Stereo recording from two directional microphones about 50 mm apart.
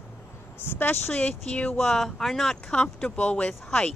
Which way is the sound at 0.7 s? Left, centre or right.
Left.